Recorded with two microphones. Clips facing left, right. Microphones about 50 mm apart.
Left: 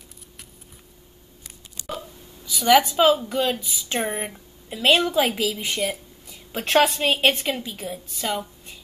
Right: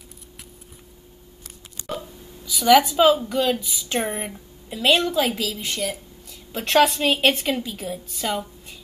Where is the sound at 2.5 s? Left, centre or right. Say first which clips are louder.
Right 1 dB; centre.